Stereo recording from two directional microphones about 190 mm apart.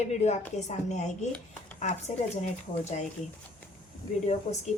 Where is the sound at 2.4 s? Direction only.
35° left (ahead or behind).